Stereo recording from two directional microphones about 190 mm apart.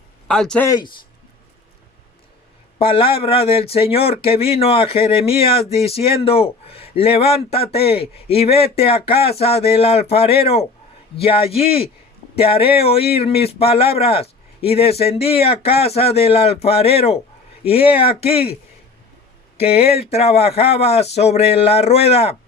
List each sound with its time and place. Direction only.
0.3 s speech: 5° left (ahead or behind)
2.7 s speech: 30° left (ahead or behind)
19.7 s speech: 55° left (ahead or behind)
20.0 s speech: 35° left (ahead or behind)